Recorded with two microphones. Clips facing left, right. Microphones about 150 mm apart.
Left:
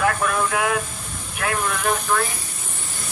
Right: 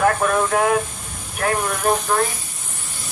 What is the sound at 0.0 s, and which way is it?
Speech, 40° right (ahead or behind).